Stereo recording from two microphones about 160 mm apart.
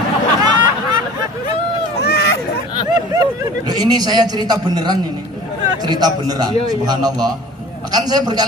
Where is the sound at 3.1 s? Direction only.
25° right (ahead or behind).